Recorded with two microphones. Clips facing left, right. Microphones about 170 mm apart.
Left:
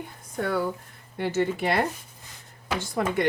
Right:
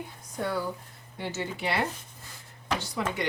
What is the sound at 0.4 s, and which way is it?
Speech, 60° left (ahead or behind).